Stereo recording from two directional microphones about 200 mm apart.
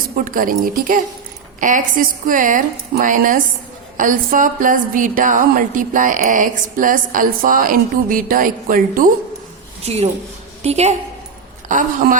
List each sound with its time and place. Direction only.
0.3 s a woman's voice: 45° right (ahead or behind)
9.8 s a woman's voice: 30° right (ahead or behind)